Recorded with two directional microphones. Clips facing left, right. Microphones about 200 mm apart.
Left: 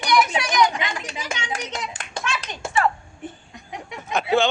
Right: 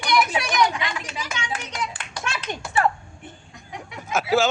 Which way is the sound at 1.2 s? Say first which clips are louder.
Left 1 dB; 25° left (ahead or behind).